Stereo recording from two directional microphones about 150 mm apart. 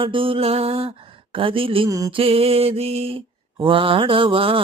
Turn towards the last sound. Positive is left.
turn(degrees=-35)  # may be behind; listen again after turning